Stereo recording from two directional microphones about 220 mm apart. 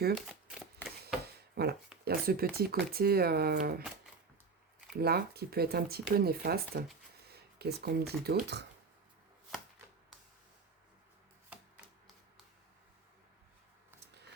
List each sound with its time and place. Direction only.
0.3 s shuffling cards: centre (ahead or behind)
1.6 s speech: 45° right (ahead or behind)
4.9 s speech: 45° right (ahead or behind)